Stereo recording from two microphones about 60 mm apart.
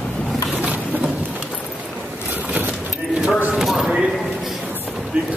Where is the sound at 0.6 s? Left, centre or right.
Right.